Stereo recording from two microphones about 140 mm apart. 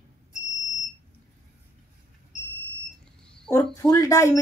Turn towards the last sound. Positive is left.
turn(degrees=20)  # may be behind; listen again after turning